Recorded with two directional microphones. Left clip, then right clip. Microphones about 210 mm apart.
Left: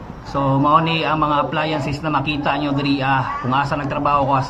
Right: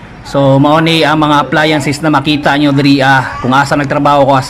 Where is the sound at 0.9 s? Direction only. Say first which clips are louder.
Right 9 dB; 55° right (ahead or behind).